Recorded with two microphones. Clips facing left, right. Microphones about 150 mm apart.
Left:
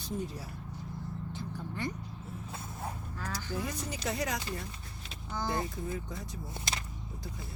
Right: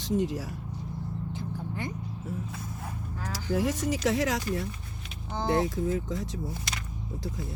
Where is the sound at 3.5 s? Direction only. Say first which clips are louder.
Right 12 dB; 85° right.